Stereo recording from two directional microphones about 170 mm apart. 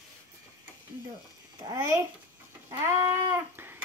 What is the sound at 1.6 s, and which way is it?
A child's voice, 20° right (ahead or behind).